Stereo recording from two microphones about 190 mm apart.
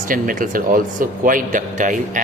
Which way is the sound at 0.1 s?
45° right (ahead or behind).